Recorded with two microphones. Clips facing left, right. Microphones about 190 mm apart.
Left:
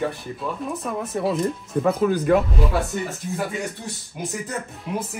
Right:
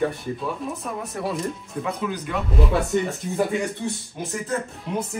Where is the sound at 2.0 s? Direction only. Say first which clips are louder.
Left 12 dB; 50° left (ahead or behind).